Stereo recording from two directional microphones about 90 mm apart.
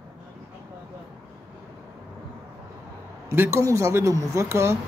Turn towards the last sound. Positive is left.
turn(degrees=-30)  # may be behind; listen again after turning